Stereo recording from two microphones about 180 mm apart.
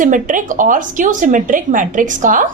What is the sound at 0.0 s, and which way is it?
Speech, 45° right (ahead or behind).